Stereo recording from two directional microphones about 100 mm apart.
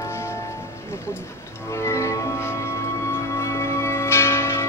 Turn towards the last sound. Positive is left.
turn(degrees=25)  # may be behind; listen again after turning